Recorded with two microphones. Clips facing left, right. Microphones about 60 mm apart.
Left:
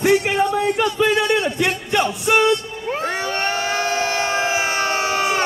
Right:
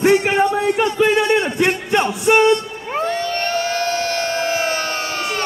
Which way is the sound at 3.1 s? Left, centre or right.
Centre.